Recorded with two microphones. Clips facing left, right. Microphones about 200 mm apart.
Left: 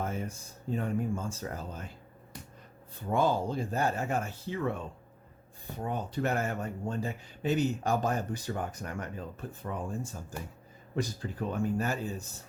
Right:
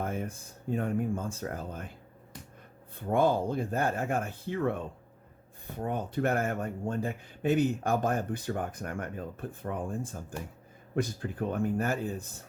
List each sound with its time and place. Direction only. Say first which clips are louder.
0.0 s speech: right 1 dB; 55° right (ahead or behind)
3.0 s speech: right 2 dB; 55° right (ahead or behind)